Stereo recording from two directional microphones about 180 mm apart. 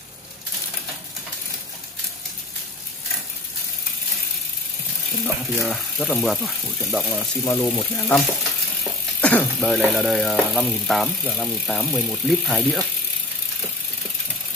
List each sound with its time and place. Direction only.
5.2 s speech: centre (ahead or behind)
7.4 s speech: 15° left (ahead or behind)
9.2 s speech: 10° left (ahead or behind)